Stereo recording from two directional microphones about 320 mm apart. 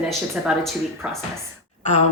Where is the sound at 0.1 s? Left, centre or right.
Centre.